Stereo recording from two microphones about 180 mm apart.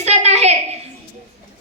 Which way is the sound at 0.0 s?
35° right (ahead or behind).